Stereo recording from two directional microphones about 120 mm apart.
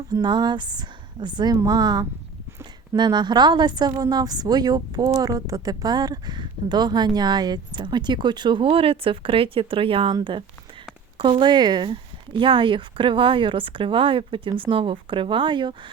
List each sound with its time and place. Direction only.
0.1 s speech: 35° right (ahead or behind)